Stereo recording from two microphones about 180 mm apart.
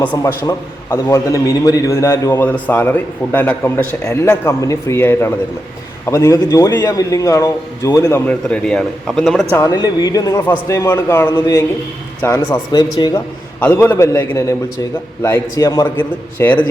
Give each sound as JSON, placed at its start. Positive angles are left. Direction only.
{"t": 0.0, "sound": "a man's voice", "side_deg": 10}
{"t": 9.6, "sound": "a man's voice", "side_deg": 15}
{"t": 12.7, "sound": "speech", "side_deg": 25}
{"t": 13.6, "sound": "a man's voice", "side_deg": 10}